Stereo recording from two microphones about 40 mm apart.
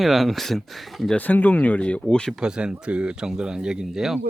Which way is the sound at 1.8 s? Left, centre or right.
Left.